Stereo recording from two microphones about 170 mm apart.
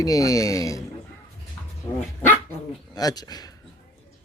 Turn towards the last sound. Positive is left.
turn(degrees=20)  # may be behind; listen again after turning